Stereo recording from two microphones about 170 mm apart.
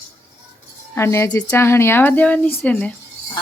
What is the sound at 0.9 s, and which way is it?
Speech, 15° left (ahead or behind).